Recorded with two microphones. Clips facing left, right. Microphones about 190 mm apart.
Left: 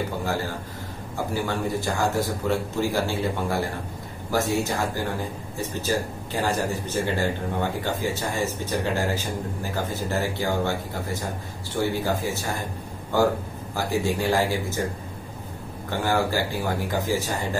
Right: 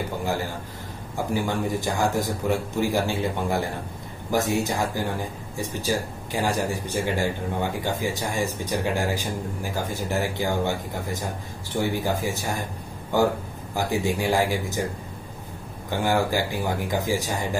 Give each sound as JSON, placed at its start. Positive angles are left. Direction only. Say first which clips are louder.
{"t": 1.1, "sound": "speech", "louder": "right 1 dB", "side_deg": -15}
{"t": 13.7, "sound": "speech", "louder": "even", "side_deg": -15}
{"t": 15.9, "sound": "speech", "louder": "right 1 dB", "side_deg": -15}